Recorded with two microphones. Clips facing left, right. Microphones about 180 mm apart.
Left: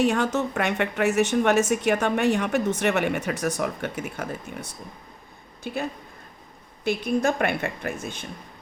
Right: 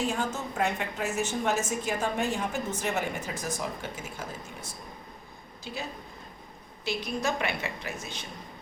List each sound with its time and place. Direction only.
0.0 s a woman's voice: 70° left (ahead or behind); by 8.3 s 50° left (ahead or behind)